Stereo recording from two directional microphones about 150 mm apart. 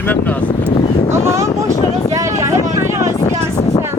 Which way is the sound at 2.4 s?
20° right (ahead or behind).